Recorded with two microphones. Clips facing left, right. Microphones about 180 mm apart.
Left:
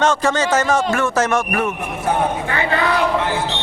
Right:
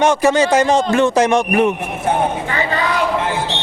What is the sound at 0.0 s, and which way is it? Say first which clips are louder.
Speech: right 4 dB; 10° right (ahead or behind).